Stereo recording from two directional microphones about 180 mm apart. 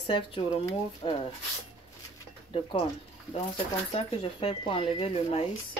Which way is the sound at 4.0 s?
30° left (ahead or behind).